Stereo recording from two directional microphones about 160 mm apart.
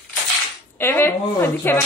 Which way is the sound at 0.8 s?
15° left (ahead or behind).